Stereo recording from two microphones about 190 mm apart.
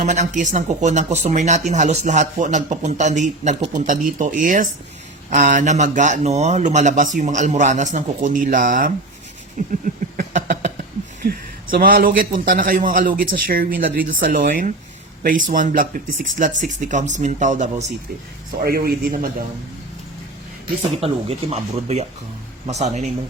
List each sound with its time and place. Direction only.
0.0 s speech: 40° right (ahead or behind)
9.6 s a sound: 45° right (ahead or behind)
11.2 s a man's voice: 50° right (ahead or behind)
18.6 s a man's voice: 55° right (ahead or behind)
21.0 s speech: 35° right (ahead or behind)